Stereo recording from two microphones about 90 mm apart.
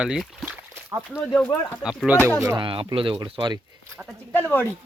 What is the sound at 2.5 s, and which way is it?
Speech, 70° right (ahead or behind).